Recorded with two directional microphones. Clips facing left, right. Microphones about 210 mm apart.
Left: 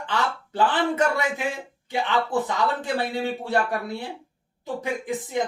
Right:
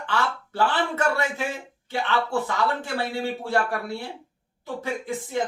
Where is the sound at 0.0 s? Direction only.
20° left (ahead or behind).